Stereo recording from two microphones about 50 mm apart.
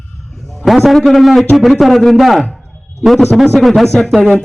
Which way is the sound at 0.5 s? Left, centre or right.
Centre.